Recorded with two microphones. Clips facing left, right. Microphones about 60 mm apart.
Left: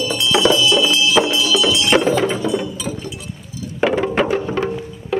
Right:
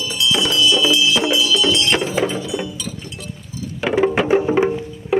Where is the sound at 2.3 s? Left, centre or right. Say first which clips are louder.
Left 5 dB; left.